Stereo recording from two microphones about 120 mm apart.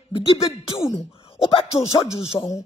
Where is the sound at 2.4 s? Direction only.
30° left (ahead or behind).